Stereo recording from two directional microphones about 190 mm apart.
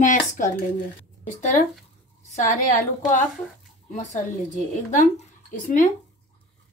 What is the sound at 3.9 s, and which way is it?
Speech, 40° left (ahead or behind).